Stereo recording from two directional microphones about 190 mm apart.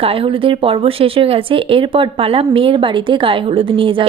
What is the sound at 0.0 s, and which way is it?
Speech, 30° right (ahead or behind).